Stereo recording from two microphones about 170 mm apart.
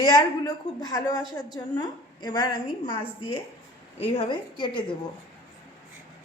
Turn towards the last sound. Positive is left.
turn(degrees=30)  # may be behind; listen again after turning